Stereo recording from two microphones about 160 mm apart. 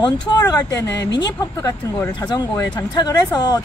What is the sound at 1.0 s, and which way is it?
Speech, 90° left.